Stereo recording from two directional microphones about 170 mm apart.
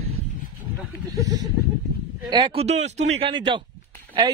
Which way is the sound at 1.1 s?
20° right (ahead or behind).